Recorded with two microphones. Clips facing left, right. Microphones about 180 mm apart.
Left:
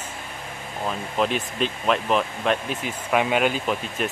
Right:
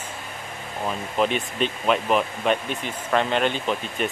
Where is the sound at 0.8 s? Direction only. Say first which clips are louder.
Right 1 dB; centre (ahead or behind).